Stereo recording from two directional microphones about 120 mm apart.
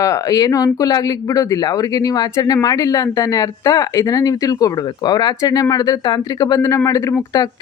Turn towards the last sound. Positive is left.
turn(degrees=30)  # may be behind; listen again after turning